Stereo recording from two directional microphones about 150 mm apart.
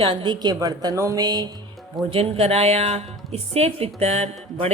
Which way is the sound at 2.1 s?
40° right (ahead or behind).